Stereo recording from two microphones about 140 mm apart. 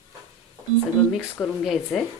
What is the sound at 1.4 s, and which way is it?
Speech, centre (ahead or behind).